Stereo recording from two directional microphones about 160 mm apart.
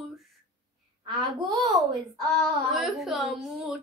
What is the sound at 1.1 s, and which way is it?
Babbling, 30° right (ahead or behind).